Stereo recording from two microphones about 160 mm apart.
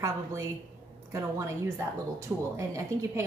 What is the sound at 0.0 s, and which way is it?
A woman's voice, 20° right (ahead or behind).